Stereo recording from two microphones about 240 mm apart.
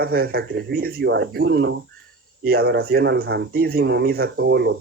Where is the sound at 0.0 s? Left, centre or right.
Right.